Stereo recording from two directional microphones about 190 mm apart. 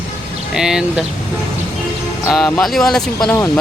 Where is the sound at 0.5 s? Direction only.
5° right (ahead or behind).